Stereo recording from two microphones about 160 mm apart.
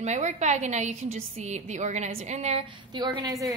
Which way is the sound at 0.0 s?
45° right (ahead or behind).